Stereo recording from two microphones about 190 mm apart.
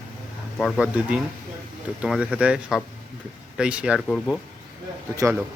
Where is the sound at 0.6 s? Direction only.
Centre (ahead or behind).